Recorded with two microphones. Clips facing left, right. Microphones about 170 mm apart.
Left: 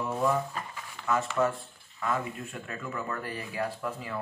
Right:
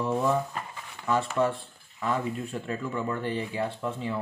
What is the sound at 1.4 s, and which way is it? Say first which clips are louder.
Speech: right 2 dB; 30° right (ahead or behind).